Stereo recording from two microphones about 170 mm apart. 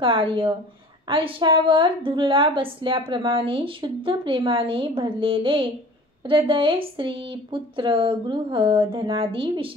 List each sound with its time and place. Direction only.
0.0 s a woman's voice: 30° right (ahead or behind)